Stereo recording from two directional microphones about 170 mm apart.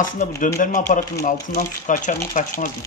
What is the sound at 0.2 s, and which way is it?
Speech, 50° left (ahead or behind).